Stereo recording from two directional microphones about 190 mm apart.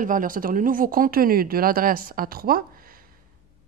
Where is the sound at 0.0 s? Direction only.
45° right (ahead or behind).